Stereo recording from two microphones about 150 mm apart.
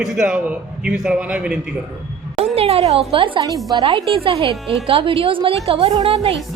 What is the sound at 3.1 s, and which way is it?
Speech, 35° right (ahead or behind).